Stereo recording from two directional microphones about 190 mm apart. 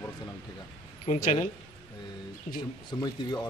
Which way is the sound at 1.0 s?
35° left (ahead or behind).